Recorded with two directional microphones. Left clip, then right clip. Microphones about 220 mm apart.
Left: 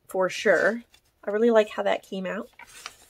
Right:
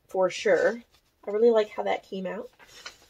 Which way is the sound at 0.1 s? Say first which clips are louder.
Left 1 dB; 15° left (ahead or behind).